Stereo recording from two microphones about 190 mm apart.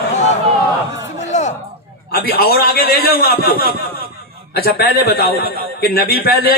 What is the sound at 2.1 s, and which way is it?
A man's voice, 55° left (ahead or behind).